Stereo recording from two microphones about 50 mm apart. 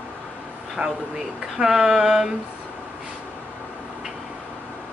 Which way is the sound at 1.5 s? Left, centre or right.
Centre.